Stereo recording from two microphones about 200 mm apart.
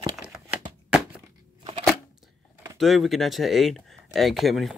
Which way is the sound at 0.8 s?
5° right (ahead or behind).